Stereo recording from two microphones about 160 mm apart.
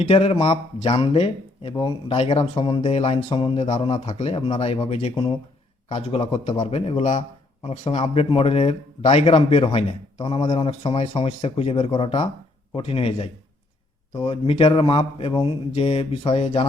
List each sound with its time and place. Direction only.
0.0 s a man's voice: 40° left (ahead or behind)